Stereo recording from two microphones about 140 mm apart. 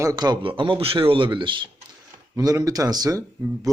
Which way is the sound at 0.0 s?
25° right (ahead or behind).